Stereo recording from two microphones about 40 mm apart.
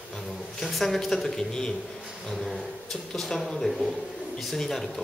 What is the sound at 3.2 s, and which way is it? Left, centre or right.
A man's voice, centre.